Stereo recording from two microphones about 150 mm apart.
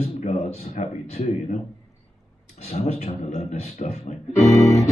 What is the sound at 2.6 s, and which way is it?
Speech, 45° left (ahead or behind).